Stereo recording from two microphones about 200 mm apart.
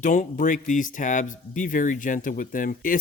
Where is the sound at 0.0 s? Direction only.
40° left (ahead or behind).